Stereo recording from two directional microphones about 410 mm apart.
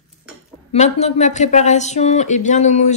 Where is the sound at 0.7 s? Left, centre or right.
Centre.